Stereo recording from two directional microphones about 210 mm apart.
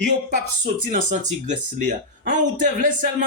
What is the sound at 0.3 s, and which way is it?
Speech, 35° right (ahead or behind).